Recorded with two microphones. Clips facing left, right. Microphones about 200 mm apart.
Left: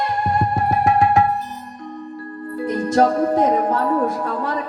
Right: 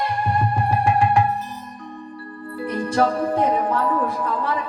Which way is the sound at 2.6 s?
40° left (ahead or behind).